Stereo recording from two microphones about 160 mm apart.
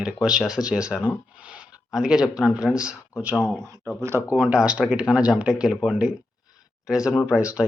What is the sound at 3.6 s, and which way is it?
Speech, 20° right (ahead or behind).